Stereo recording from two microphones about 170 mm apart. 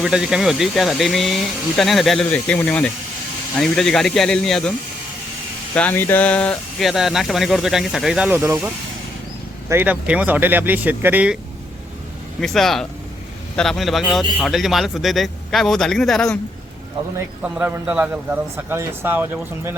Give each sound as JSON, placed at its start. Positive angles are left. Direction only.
{"t": 0.0, "sound": "speech", "side_deg": -5}
{"t": 5.7, "sound": "a man's voice", "side_deg": 10}
{"t": 12.4, "sound": "speech", "side_deg": 0}
{"t": 17.2, "sound": "a man's voice", "side_deg": -10}